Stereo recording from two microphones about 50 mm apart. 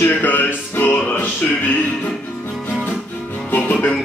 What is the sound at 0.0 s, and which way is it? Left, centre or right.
Music, left.